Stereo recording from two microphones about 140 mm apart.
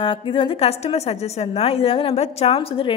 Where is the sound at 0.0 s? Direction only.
35° left (ahead or behind).